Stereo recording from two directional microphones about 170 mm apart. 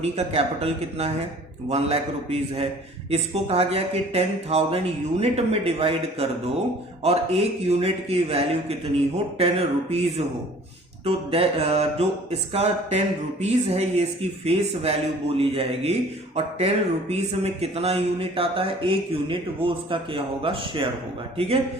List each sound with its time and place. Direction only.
0.0 s speech: 35° right (ahead or behind)